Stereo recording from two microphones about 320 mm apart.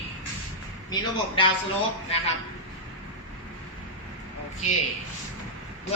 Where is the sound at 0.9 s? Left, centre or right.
Centre.